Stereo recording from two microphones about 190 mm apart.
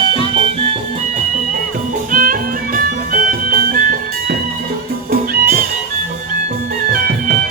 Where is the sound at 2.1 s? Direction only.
45° right (ahead or behind).